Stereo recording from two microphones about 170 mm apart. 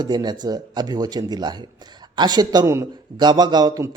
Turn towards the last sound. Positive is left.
turn(degrees=-20)  # may be behind; listen again after turning